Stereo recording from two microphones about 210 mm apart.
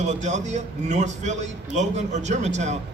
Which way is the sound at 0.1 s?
35° right (ahead or behind).